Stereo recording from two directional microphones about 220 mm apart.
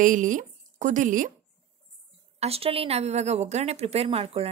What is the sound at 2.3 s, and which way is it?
A woman's voice, 25° right (ahead or behind).